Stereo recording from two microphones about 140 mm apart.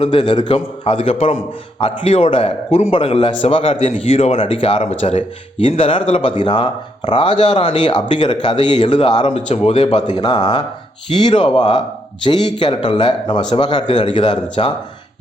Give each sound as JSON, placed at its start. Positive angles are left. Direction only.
{"t": 0.0, "sound": "a man's voice", "side_deg": 35}
{"t": 9.5, "sound": "a man's voice", "side_deg": 45}